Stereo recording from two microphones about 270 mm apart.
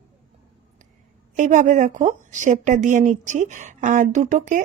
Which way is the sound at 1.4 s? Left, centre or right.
Right.